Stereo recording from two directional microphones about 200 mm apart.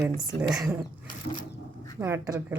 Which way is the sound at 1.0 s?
25° left (ahead or behind).